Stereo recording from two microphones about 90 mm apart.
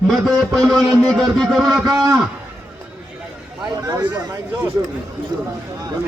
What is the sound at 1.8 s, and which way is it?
Speech, 40° right (ahead or behind).